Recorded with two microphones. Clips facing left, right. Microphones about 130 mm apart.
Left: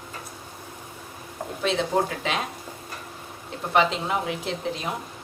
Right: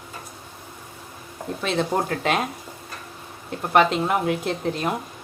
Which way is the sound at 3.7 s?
60° right (ahead or behind).